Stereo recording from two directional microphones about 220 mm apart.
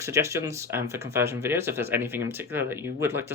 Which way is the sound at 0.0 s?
15° right (ahead or behind).